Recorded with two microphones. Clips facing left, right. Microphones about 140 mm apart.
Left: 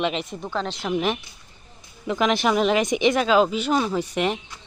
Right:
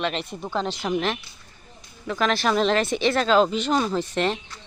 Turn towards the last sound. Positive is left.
turn(degrees=10)  # may be behind; listen again after turning